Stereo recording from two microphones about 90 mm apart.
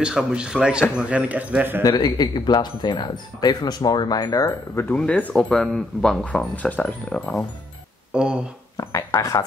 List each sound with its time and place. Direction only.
0.0 s speech: 10° right (ahead or behind)
1.8 s speech: 45° left (ahead or behind)
4.9 s speech: 15° left (ahead or behind)
8.1 s speech: 10° right (ahead or behind)
8.7 s a sound: 40° left (ahead or behind)